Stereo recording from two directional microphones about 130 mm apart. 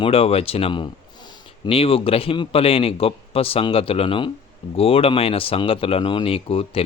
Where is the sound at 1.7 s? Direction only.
45° left (ahead or behind).